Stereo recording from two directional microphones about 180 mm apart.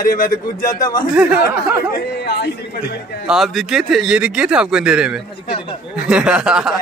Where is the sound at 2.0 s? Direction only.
65° left (ahead or behind).